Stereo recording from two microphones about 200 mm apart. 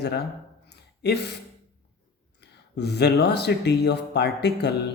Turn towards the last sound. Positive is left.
turn(degrees=55)  # may be behind; listen again after turning